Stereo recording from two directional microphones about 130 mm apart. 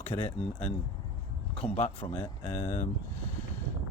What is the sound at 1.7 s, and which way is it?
Speech, 60° left (ahead or behind).